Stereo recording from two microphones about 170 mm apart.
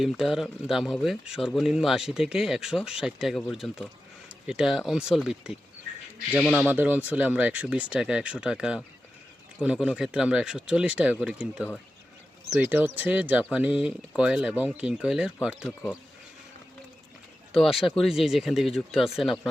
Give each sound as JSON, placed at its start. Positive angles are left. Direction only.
{"t": 0.0, "sound": "speech", "side_deg": 0}
{"t": 17.5, "sound": "speech", "side_deg": 0}